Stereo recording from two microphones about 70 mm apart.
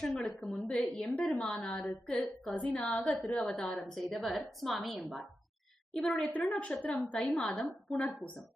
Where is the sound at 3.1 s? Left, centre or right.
Left.